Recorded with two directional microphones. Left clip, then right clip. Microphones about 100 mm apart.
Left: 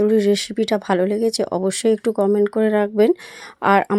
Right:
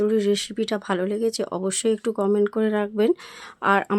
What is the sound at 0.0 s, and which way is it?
Speech, 35° left (ahead or behind).